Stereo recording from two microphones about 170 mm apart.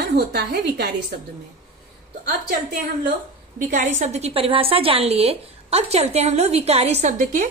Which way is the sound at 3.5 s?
45° right (ahead or behind).